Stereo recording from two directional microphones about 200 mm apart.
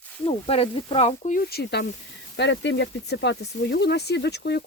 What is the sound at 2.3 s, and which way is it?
Speech, 60° left (ahead or behind).